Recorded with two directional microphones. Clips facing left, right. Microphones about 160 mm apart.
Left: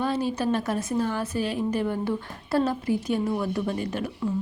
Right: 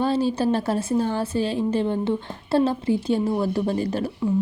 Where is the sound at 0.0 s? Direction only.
30° right (ahead or behind).